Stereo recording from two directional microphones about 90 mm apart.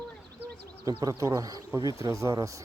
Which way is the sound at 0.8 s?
35° right (ahead or behind).